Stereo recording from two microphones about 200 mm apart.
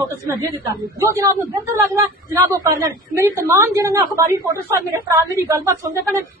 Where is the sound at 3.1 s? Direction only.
15° right (ahead or behind).